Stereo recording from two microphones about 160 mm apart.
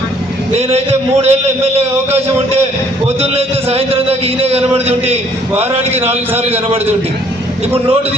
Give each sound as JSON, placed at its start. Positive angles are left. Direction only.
{"t": 0.5, "sound": "speech", "side_deg": -40}